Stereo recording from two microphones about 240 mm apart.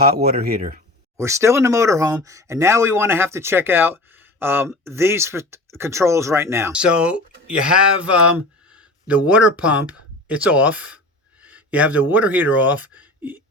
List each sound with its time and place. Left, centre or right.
0.0 s speech: right
1.1 s speech: centre